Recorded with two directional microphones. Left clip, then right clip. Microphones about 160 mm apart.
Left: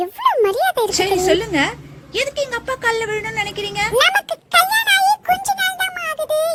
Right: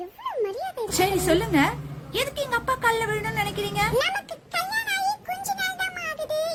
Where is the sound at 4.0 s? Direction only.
30° left (ahead or behind).